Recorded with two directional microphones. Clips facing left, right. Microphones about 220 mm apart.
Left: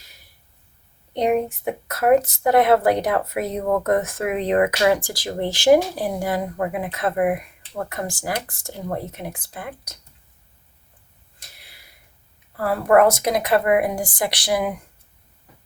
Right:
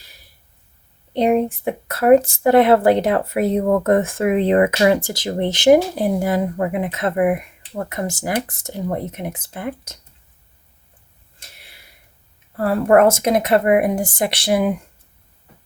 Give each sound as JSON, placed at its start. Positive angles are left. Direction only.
{"t": 1.1, "sound": "speech", "side_deg": -30}
{"t": 11.3, "sound": "a sound", "side_deg": -25}
{"t": 12.6, "sound": "speech", "side_deg": -25}